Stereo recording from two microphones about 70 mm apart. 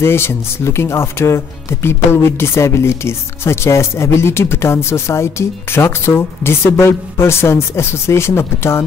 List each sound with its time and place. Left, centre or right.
0.0 s speech: left